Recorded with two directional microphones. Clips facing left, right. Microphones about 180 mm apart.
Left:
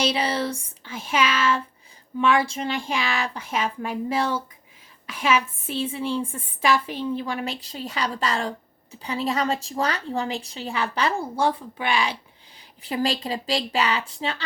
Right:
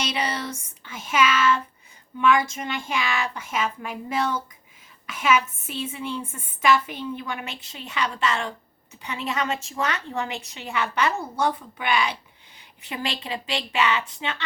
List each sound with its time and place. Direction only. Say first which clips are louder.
0.0 s a woman's voice: left 4 dB; 30° left (ahead or behind)